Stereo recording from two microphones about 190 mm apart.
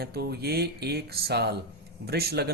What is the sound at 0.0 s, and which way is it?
A man's voice, 55° right (ahead or behind).